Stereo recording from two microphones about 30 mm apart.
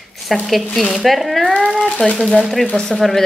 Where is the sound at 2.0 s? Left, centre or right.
Left.